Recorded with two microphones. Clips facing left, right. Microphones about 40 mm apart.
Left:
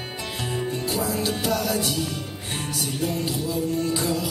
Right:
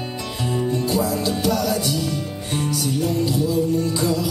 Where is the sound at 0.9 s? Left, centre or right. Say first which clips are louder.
Right 4 dB; centre.